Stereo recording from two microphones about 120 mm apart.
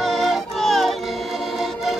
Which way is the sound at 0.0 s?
Centre (ahead or behind).